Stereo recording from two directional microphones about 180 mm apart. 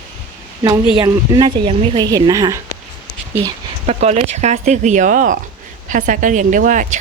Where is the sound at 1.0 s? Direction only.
20° right (ahead or behind).